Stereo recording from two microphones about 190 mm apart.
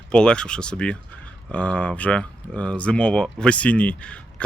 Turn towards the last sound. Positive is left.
turn(degrees=5)  # may be behind; listen again after turning